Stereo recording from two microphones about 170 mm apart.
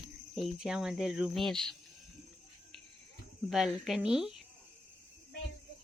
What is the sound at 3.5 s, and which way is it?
Cricket, centre (ahead or behind).